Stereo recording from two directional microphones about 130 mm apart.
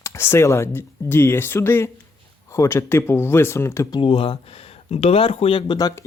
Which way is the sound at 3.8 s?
40° left (ahead or behind).